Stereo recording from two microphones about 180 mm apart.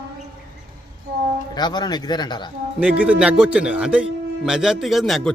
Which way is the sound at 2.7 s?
5° right (ahead or behind).